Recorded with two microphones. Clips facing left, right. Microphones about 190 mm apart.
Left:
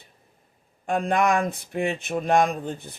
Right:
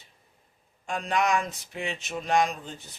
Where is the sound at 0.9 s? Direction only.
55° left (ahead or behind).